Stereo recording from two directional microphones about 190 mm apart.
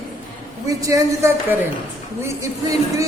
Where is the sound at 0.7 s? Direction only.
15° right (ahead or behind).